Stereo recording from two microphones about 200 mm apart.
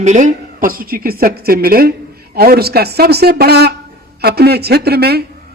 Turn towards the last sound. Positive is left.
turn(degrees=-50)  # may be behind; listen again after turning